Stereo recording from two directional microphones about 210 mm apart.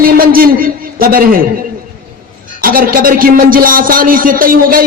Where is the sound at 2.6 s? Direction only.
40° right (ahead or behind).